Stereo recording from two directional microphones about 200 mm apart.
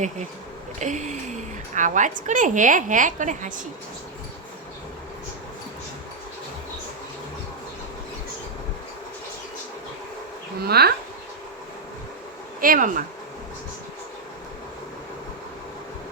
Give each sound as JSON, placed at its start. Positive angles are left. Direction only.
{"t": 0.8, "sound": "a woman's voice", "side_deg": -35}
{"t": 10.6, "sound": "speech", "side_deg": -50}
{"t": 12.5, "sound": "speech", "side_deg": -45}